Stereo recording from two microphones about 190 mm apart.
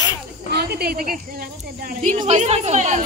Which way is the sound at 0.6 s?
55° right (ahead or behind).